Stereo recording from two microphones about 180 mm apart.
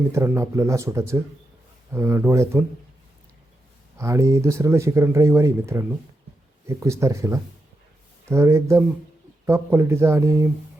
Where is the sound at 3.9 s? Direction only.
15° right (ahead or behind).